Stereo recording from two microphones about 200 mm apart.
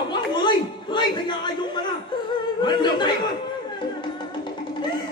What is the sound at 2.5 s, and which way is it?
Speech, 20° left (ahead or behind).